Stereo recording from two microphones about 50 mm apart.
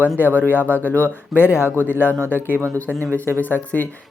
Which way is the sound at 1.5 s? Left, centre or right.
Left.